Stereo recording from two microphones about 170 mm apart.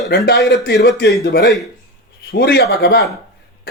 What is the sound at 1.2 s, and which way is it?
Speech, 70° left (ahead or behind).